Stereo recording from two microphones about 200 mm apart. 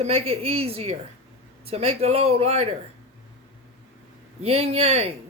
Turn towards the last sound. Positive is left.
turn(degrees=-30)  # may be behind; listen again after turning